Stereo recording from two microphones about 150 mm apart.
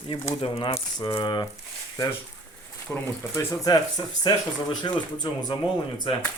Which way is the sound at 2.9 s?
10° left (ahead or behind).